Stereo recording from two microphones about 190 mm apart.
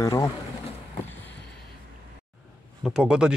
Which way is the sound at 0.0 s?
20° left (ahead or behind).